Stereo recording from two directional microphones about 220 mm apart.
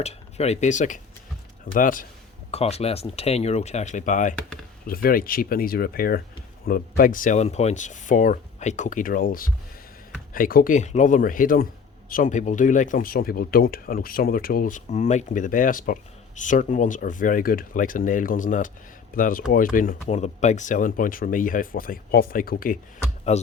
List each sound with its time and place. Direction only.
0.0 s speech: 30° left (ahead or behind)